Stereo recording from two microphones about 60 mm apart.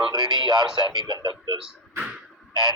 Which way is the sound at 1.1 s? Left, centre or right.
Right.